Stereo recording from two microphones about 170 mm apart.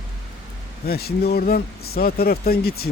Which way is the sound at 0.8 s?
65° left (ahead or behind).